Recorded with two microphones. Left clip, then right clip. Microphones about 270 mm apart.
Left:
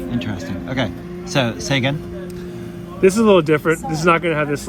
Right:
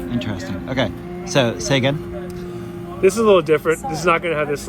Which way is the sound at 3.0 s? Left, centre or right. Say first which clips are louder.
Left 1 dB; left.